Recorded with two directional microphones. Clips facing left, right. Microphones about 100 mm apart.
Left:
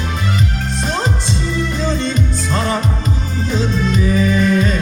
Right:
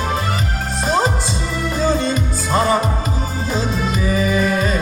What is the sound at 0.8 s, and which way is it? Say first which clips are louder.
Music: right 4 dB; 5° right (ahead or behind).